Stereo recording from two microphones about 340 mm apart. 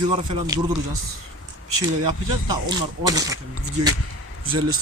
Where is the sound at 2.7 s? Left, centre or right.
Centre.